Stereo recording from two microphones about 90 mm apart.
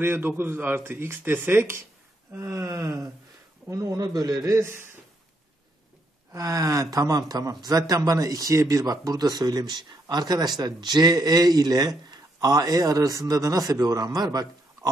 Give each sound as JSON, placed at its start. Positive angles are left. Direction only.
{"t": 0.0, "sound": "a man's voice", "side_deg": -25}
{"t": 6.3, "sound": "speech", "side_deg": -40}